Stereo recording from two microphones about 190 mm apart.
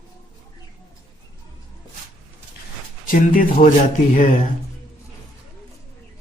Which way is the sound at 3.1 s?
45° left (ahead or behind).